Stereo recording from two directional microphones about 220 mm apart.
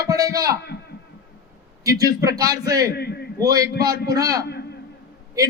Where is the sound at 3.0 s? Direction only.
45° left (ahead or behind).